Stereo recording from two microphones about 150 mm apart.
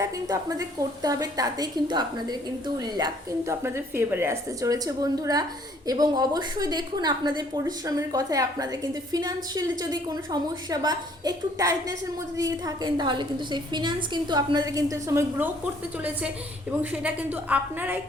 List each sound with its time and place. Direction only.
0.0 s a woman's voice: 25° right (ahead or behind)
16.8 s a woman's voice: 10° right (ahead or behind)